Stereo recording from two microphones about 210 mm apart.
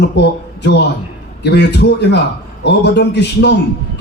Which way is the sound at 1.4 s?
50° left (ahead or behind).